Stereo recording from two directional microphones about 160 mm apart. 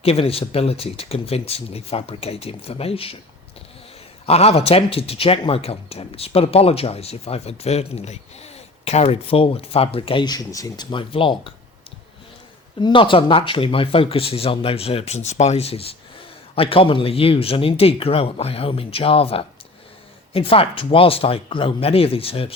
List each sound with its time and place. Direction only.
0.0 s a man's voice: 35° left (ahead or behind)
4.3 s a man's voice: 40° left (ahead or behind)
12.8 s a man's voice: 30° left (ahead or behind)